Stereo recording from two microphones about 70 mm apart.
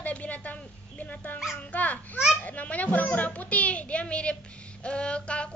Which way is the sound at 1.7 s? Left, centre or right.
Left.